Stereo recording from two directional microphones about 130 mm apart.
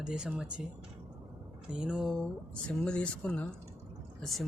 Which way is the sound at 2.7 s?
10° left (ahead or behind).